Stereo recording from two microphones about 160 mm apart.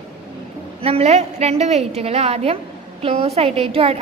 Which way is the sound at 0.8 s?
40° right (ahead or behind).